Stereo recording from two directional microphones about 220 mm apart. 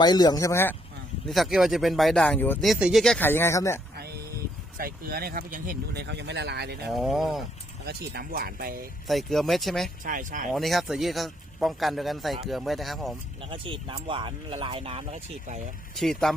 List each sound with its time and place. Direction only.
0.0 s speech: 20° left (ahead or behind)
1.3 s speech: centre (ahead or behind)
3.9 s a sound: 45° right (ahead or behind)
4.8 s speech: 40° right (ahead or behind)
6.9 s speech: centre (ahead or behind)
7.9 s speech: 45° right (ahead or behind)
9.0 s speech: centre (ahead or behind)
10.0 s speech: 35° right (ahead or behind)
10.5 s speech: centre (ahead or behind)
13.4 s speech: 25° right (ahead or behind)
16.0 s speech: centre (ahead or behind)